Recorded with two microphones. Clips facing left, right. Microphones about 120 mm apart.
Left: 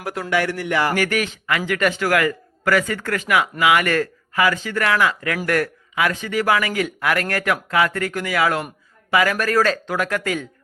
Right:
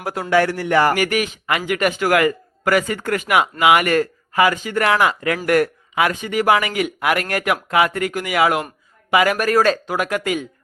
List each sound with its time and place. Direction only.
0.0 s speech: 30° right (ahead or behind); by 0.9 s 45° right (ahead or behind)
0.9 s a man's voice: 15° right (ahead or behind)